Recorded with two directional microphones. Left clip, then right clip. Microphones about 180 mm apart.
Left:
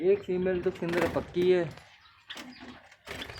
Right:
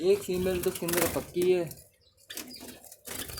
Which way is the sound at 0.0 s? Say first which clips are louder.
Even; 10° right (ahead or behind).